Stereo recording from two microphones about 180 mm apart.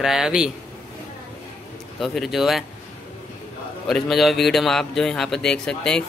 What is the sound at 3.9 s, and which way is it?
Speech, centre (ahead or behind).